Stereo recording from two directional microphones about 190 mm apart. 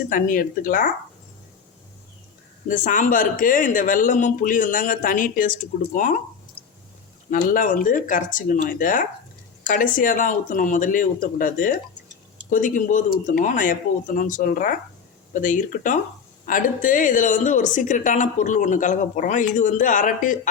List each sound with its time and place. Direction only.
0.1 s speech: 45° left (ahead or behind)
2.6 s speech: 45° left (ahead or behind)
7.3 s speech: 45° left (ahead or behind)